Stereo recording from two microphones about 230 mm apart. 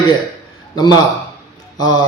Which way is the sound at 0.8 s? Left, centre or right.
Centre.